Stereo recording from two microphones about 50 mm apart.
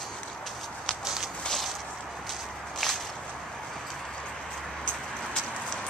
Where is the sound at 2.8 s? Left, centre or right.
Centre.